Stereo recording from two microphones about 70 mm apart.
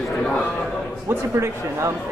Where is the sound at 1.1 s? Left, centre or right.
Right.